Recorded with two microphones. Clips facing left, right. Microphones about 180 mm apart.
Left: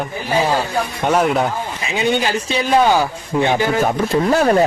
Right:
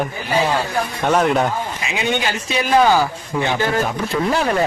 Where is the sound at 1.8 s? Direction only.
35° left (ahead or behind).